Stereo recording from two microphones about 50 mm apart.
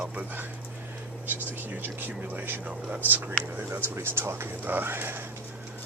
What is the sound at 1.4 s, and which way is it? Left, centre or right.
Speech, right.